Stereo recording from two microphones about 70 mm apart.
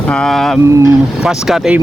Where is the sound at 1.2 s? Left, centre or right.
Centre.